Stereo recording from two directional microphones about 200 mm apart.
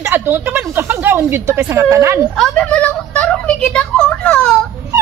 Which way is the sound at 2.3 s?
5° left (ahead or behind).